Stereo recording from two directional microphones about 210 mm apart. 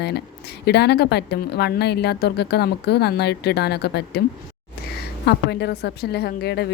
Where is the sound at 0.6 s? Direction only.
50° left (ahead or behind).